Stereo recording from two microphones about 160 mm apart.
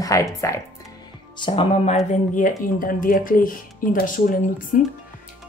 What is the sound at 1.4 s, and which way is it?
Speech, 35° left (ahead or behind).